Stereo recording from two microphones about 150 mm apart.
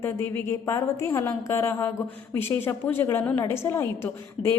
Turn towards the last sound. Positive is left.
turn(degrees=15)  # may be behind; listen again after turning